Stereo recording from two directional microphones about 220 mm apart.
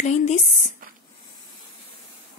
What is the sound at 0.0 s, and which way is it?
Speech, 30° left (ahead or behind).